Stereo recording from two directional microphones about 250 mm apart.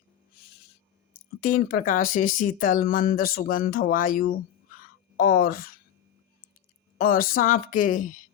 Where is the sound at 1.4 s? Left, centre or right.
Left.